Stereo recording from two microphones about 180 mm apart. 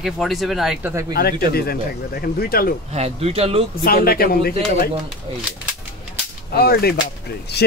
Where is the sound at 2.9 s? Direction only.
35° right (ahead or behind).